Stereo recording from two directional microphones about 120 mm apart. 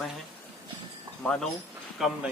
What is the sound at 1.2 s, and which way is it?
Speech, 5° left (ahead or behind).